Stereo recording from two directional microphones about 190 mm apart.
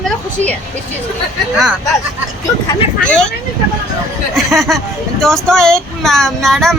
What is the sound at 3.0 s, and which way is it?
Speech, 5° left (ahead or behind).